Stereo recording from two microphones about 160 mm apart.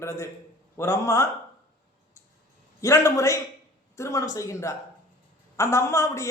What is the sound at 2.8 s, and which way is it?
A woman's voice, 20° left (ahead or behind).